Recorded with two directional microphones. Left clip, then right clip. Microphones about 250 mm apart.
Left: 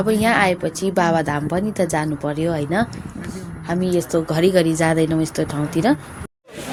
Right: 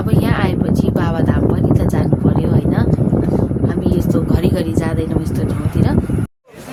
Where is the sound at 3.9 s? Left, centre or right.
Right.